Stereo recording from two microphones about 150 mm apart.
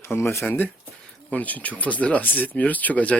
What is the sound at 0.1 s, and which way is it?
Speech, 15° left (ahead or behind).